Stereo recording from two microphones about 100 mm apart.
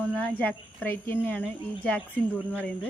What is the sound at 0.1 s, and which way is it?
Speech, 15° left (ahead or behind).